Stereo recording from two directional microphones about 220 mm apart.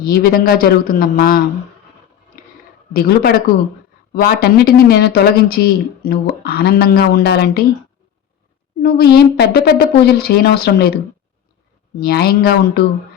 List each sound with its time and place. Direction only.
0.0 s speech: 40° left (ahead or behind)
2.3 s a sound: 40° left (ahead or behind)
2.9 s speech: 45° left (ahead or behind)
8.8 s speech: 45° left (ahead or behind)